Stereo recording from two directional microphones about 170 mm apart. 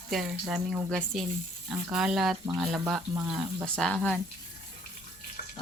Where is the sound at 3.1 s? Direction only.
15° right (ahead or behind).